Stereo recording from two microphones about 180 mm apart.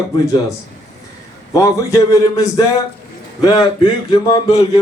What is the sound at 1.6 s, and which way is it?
A man's voice, 15° left (ahead or behind).